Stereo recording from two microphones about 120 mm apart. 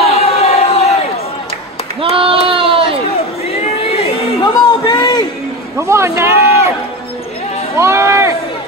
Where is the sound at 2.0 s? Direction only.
50° right (ahead or behind).